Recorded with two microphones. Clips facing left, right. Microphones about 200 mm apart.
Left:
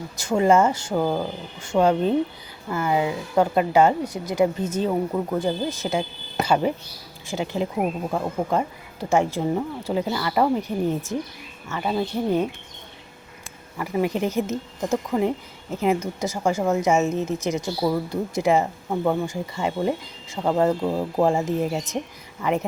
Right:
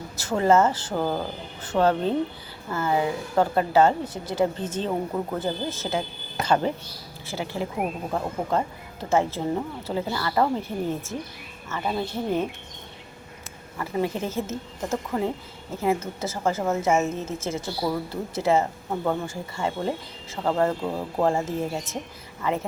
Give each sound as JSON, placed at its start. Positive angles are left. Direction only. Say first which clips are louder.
{"t": 0.3, "sound": "speech", "louder": "left 2 dB", "side_deg": 15}
{"t": 13.7, "sound": "speech", "louder": "left 3 dB", "side_deg": 15}